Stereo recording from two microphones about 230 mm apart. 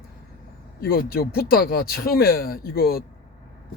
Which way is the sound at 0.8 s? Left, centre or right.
Left.